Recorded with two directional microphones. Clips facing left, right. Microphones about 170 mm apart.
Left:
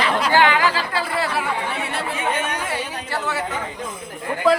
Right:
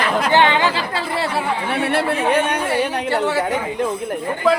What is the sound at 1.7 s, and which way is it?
Chatter, 65° right (ahead or behind).